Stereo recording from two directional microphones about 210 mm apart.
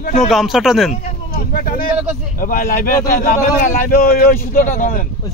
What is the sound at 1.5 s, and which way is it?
A man's voice, 45° left (ahead or behind).